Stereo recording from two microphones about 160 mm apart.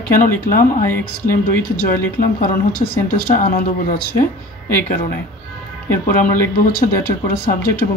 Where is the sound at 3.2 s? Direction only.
60° left (ahead or behind).